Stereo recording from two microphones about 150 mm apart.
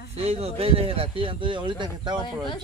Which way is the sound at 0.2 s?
40° right (ahead or behind).